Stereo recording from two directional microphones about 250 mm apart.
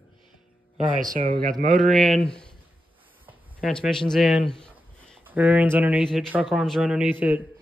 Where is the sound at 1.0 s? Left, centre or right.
Right.